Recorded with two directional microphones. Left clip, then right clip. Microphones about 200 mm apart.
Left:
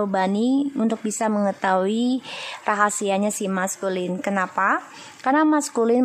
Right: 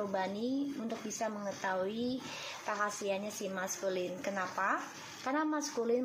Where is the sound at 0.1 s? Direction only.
50° left (ahead or behind).